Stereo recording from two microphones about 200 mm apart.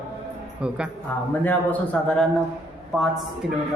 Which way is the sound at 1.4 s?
10° left (ahead or behind).